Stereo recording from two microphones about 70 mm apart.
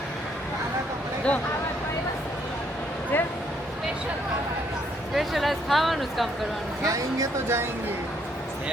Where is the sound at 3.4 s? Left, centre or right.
Centre.